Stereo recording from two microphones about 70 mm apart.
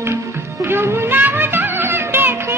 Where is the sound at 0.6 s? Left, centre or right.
Right.